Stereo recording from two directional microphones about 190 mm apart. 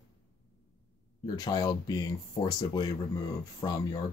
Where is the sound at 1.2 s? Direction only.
20° left (ahead or behind).